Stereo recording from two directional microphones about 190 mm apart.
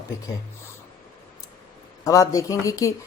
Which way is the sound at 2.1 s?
15° left (ahead or behind).